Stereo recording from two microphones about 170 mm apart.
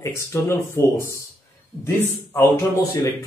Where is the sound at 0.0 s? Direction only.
15° left (ahead or behind).